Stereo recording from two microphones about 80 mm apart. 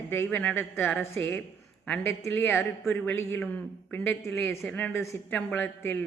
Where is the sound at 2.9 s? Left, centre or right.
Left.